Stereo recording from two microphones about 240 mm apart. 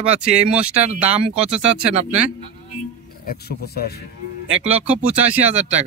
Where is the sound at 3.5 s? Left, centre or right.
Left.